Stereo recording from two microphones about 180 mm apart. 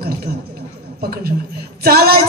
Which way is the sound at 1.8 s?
60° right (ahead or behind).